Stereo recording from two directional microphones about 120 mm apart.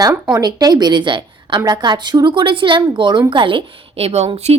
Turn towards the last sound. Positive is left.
turn(degrees=-65)  # may be behind; listen again after turning